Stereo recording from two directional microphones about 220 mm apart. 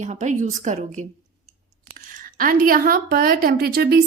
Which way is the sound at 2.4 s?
40° right (ahead or behind).